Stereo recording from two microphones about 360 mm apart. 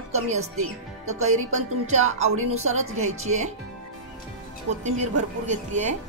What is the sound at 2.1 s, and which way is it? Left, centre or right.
Speech, centre.